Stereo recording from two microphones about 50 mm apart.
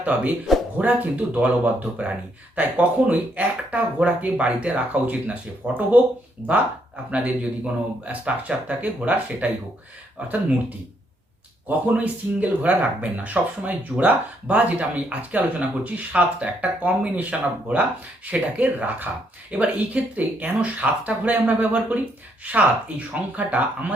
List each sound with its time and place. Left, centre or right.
0.0 s speech: right
11.9 s speech: right
18.5 s speech: right